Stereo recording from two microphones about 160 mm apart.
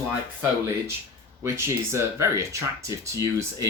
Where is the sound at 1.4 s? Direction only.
15° right (ahead or behind).